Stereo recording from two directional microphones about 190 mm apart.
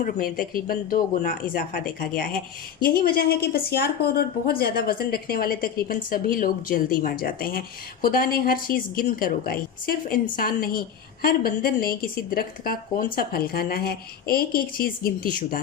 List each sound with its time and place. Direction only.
0.0 s a woman's voice: 50° left (ahead or behind)